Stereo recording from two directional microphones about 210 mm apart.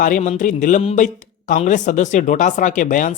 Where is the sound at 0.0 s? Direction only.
35° left (ahead or behind).